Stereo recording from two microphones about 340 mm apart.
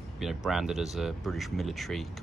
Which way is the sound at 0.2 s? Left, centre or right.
Centre.